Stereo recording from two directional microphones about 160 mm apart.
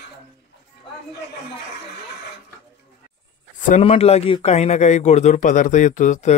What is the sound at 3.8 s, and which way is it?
A man's voice, 40° left (ahead or behind).